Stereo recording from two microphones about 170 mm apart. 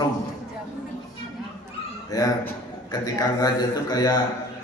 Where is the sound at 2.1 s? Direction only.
20° left (ahead or behind).